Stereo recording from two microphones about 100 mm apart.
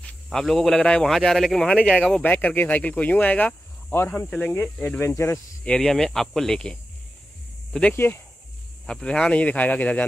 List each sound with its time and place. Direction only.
0.0 s speech: 5° left (ahead or behind)
2.2 s speech: 15° left (ahead or behind)
4.3 s speech: 10° left (ahead or behind)
5.0 s speech: 30° left (ahead or behind)
5.7 s speech: 10° left (ahead or behind)
7.9 s speech: 25° left (ahead or behind)
8.8 s speech: 10° left (ahead or behind)